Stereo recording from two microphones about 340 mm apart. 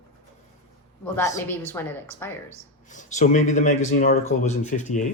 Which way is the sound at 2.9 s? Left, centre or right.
Left.